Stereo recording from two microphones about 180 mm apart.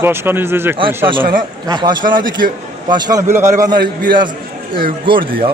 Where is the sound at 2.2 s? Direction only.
50° right (ahead or behind).